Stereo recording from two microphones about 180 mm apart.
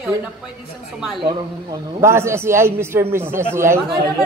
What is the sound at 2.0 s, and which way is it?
A man's voice, 15° right (ahead or behind).